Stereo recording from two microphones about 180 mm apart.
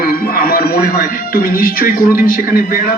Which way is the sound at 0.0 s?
55° left (ahead or behind).